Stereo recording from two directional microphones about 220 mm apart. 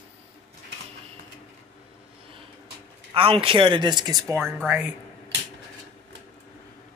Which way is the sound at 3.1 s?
25° right (ahead or behind).